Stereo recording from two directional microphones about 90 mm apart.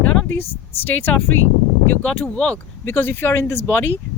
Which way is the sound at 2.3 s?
15° left (ahead or behind).